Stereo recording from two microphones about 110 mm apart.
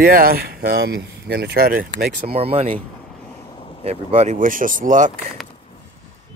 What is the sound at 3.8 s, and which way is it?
Speech, 75° right (ahead or behind).